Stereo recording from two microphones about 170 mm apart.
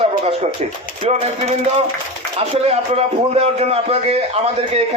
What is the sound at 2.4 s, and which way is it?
A man's voice, 35° right (ahead or behind).